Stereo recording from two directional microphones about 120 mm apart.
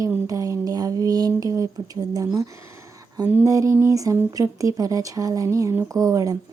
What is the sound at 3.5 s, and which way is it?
Speech, 30° right (ahead or behind).